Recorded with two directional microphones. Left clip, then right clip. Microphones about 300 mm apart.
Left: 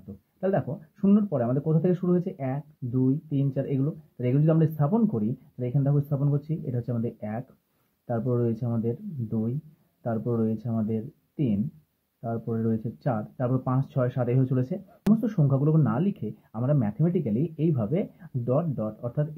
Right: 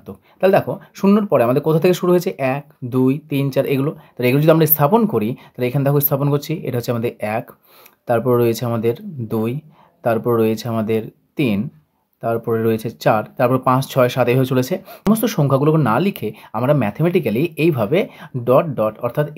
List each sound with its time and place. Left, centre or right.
0.4 s speech: right